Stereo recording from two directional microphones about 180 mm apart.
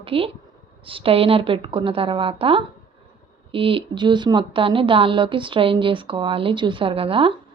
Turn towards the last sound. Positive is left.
turn(degrees=-30)  # may be behind; listen again after turning